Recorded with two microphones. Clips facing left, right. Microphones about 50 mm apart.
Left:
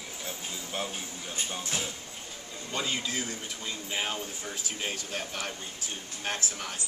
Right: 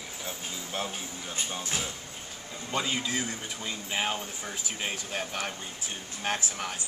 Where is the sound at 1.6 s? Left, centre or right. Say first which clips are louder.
Even; centre.